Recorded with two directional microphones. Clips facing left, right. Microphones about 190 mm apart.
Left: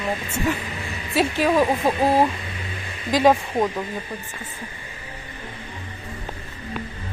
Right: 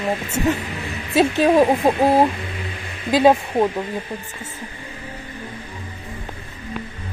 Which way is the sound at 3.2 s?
15° right (ahead or behind).